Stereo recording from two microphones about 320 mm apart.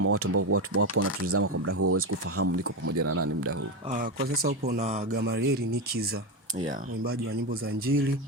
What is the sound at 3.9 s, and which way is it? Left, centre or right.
Speech, right.